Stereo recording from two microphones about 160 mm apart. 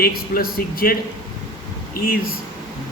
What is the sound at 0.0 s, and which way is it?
Speech, 70° left (ahead or behind).